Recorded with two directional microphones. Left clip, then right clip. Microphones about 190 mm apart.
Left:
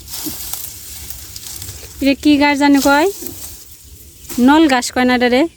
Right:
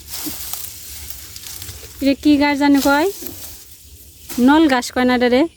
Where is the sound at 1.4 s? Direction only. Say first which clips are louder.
Left 1 dB; 5° left (ahead or behind).